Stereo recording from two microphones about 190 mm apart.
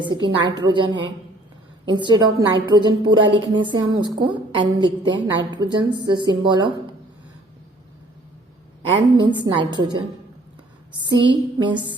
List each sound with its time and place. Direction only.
0.0 s a woman's voice: 25° right (ahead or behind)
9.1 s a woman's voice: 25° right (ahead or behind)
11.0 s a woman's voice: 25° right (ahead or behind)